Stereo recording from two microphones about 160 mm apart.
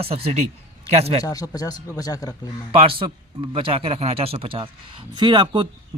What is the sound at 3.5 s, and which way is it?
Speech, 35° right (ahead or behind).